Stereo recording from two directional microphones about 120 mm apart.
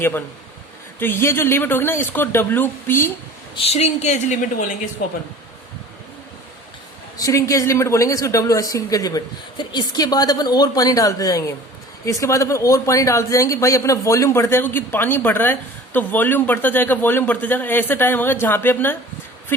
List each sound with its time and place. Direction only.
0.9 s a woman's voice: 20° left (ahead or behind)
3.5 s a woman's voice: 55° left (ahead or behind); by 4.4 s 90° left
7.2 s a woman's voice: 25° left (ahead or behind)